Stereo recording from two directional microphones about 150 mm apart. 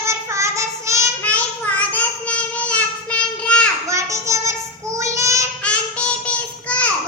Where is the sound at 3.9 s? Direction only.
20° right (ahead or behind).